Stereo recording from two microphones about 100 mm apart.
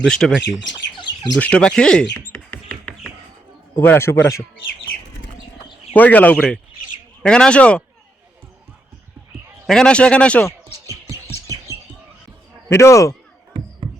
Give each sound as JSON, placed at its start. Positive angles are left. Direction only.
{"t": 0.0, "sound": "speech", "side_deg": 5}
{"t": 0.9, "sound": "bird", "side_deg": 50}
{"t": 1.4, "sound": "speech", "side_deg": 10}
{"t": 2.2, "sound": "a sound", "side_deg": 20}
{"t": 3.8, "sound": "a man's voice", "side_deg": 25}
{"t": 5.9, "sound": "speech", "side_deg": 15}
{"t": 9.6, "sound": "speech", "side_deg": 5}
{"t": 10.8, "sound": "music", "side_deg": -35}
{"t": 12.6, "sound": "a man's voice", "side_deg": 30}